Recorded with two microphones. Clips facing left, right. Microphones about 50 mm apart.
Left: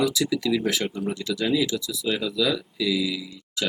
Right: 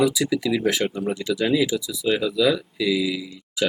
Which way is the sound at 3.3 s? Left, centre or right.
Centre.